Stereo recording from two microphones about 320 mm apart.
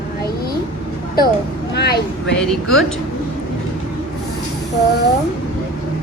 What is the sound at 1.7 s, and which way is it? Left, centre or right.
Speech, left.